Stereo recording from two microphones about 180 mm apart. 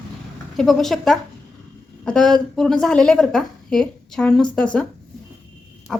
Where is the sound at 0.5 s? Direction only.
Centre (ahead or behind).